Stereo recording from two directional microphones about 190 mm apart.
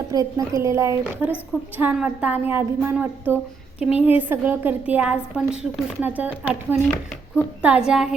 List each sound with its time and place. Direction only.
0.1 s a woman's voice: 20° right (ahead or behind); by 8.1 s 5° right (ahead or behind)